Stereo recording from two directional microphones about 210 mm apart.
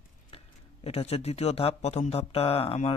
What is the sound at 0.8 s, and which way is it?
Speech, 30° left (ahead or behind).